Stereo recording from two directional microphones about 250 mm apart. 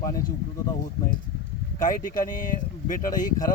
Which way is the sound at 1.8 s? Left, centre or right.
Left.